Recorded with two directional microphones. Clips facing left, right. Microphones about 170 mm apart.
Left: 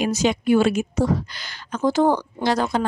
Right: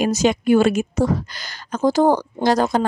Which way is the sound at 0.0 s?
45° right (ahead or behind).